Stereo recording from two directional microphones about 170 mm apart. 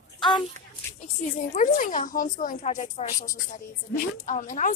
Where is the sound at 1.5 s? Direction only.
50° left (ahead or behind).